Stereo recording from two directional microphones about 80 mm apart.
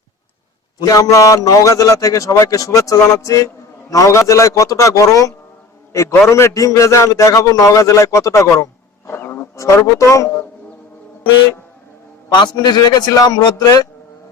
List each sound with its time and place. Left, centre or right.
0.9 s a man's voice: left
9.0 s wild animals: left
9.6 s a man's voice: left
12.3 s a man's voice: left